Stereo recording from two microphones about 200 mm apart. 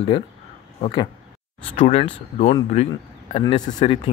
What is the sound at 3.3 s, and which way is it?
Speech, 30° left (ahead or behind).